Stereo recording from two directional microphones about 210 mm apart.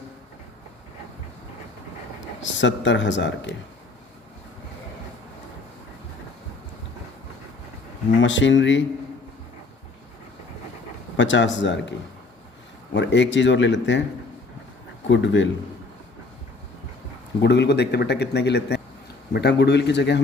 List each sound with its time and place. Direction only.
2.4 s speech: 60° left (ahead or behind)
8.2 s speech: 60° left (ahead or behind)
11.2 s speech: 60° left (ahead or behind)
15.0 s speech: 60° left (ahead or behind)
17.4 s speech: 55° left (ahead or behind)